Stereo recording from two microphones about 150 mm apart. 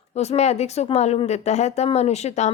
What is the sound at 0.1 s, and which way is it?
A woman's voice, 45° left (ahead or behind).